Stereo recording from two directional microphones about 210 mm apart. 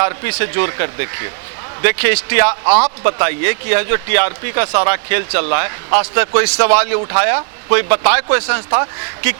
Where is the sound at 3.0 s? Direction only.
15° right (ahead or behind).